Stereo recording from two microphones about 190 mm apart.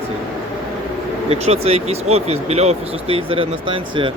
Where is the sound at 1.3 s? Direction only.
30° right (ahead or behind).